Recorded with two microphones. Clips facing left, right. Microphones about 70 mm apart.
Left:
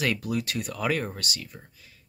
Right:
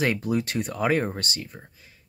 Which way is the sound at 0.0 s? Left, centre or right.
Right.